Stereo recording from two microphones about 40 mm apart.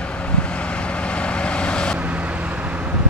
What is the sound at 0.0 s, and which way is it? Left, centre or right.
Vehicle, left.